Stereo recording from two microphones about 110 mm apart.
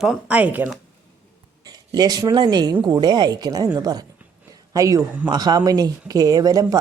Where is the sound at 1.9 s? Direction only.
35° right (ahead or behind).